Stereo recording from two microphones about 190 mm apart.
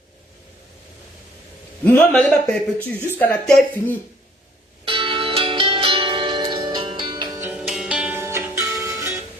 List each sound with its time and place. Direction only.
1.8 s speech: 5° left (ahead or behind)
4.9 s music: 25° right (ahead or behind)
7.4 s music: 5° right (ahead or behind)